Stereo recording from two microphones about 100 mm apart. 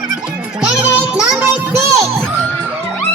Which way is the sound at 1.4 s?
25° right (ahead or behind).